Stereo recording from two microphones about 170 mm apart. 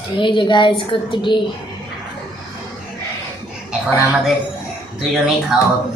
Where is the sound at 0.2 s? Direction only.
30° left (ahead or behind).